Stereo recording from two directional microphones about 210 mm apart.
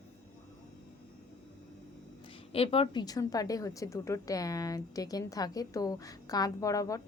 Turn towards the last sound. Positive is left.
turn(degrees=15)  # may be behind; listen again after turning